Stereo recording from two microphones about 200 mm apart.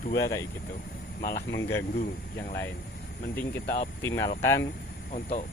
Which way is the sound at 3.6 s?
45° left (ahead or behind).